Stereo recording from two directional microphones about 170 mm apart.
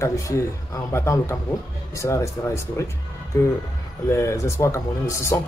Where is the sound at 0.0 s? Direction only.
20° left (ahead or behind).